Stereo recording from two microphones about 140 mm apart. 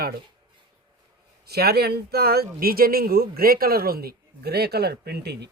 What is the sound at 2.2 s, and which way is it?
Speech, 90° right.